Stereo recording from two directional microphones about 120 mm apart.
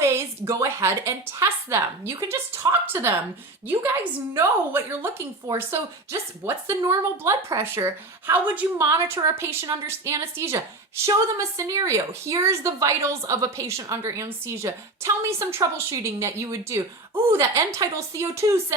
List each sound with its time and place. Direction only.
0.0 s a woman's voice: 20° right (ahead or behind)
4.4 s a woman's voice: 20° right (ahead or behind)